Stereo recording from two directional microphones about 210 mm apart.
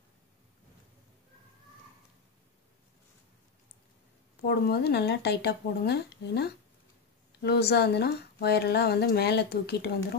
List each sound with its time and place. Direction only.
4.5 s speech: 50° left (ahead or behind)